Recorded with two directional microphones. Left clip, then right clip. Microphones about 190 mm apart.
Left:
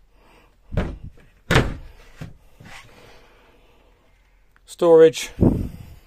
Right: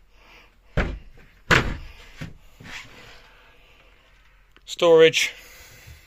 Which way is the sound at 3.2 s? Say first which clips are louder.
Right 1 dB; 55° left (ahead or behind).